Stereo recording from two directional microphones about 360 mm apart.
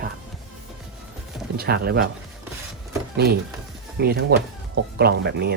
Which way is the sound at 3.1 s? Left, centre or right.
Right.